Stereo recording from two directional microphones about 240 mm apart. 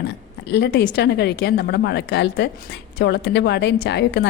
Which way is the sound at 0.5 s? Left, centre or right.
Left.